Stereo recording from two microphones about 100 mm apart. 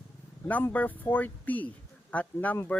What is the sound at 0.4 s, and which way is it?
Speech, 15° left (ahead or behind).